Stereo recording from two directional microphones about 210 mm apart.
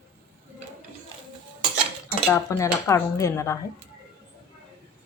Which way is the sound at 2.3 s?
15° left (ahead or behind).